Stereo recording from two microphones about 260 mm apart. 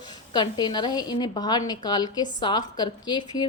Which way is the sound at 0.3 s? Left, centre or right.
Centre.